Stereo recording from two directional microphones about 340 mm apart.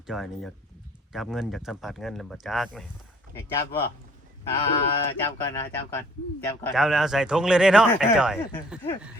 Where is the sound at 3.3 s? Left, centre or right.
Right.